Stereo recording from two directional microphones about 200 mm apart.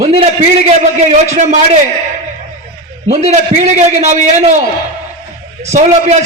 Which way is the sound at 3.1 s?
35° right (ahead or behind).